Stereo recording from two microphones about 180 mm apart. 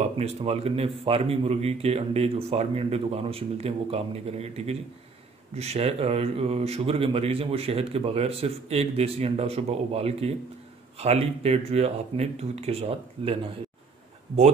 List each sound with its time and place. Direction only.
0.2 s speech: 35° right (ahead or behind)